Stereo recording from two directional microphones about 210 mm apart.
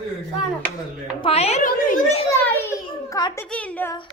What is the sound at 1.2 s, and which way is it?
A woman's voice, 30° left (ahead or behind).